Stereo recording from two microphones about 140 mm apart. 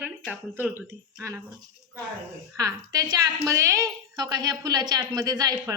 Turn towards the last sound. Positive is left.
turn(degrees=-25)  # may be behind; listen again after turning